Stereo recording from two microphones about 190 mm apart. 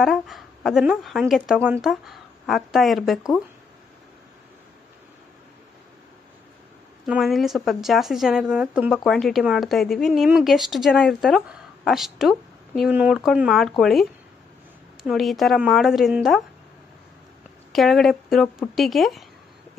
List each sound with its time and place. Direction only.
0.0 s a woman's voice: centre (ahead or behind)
7.1 s a woman's voice: centre (ahead or behind)
15.0 s a woman's voice: centre (ahead or behind)
17.7 s a woman's voice: centre (ahead or behind)